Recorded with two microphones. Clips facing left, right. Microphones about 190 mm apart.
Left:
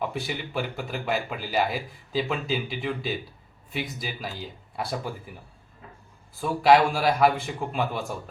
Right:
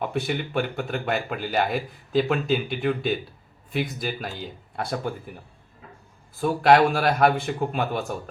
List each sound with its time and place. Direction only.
0.1 s speech: centre (ahead or behind)
6.4 s speech: centre (ahead or behind)